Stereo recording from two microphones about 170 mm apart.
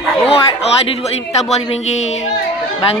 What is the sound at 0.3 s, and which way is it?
A man's voice, 35° left (ahead or behind).